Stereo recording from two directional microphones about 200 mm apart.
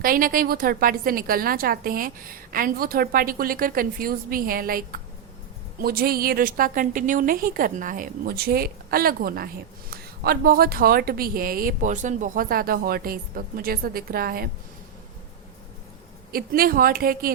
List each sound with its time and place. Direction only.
0.0 s a woman's voice: 45° right (ahead or behind)
16.3 s a woman's voice: 45° right (ahead or behind)